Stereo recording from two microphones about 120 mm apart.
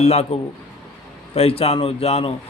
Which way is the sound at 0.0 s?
60° left (ahead or behind).